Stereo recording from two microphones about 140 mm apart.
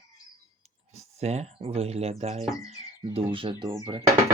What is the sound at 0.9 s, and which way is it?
Speech, 55° right (ahead or behind).